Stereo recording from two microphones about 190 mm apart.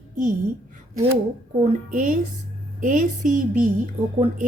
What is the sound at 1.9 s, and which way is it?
A woman's voice, 45° right (ahead or behind).